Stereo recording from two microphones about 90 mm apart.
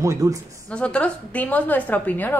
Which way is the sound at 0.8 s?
15° left (ahead or behind).